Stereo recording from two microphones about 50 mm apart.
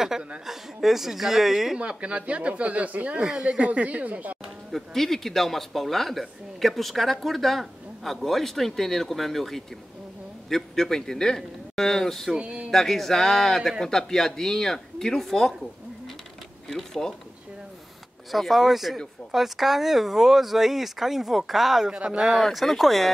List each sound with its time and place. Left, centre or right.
0.5 s a man's voice: centre
1.8 s speech: right
4.6 s a man's voice: centre
12.3 s speech: centre
12.7 s speech: centre
16.6 s speech: centre
18.3 s a man's voice: centre
21.9 s speech: right
22.4 s a man's voice: centre